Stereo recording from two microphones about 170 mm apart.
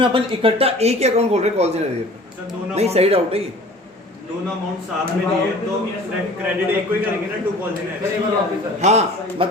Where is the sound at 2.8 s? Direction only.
35° right (ahead or behind).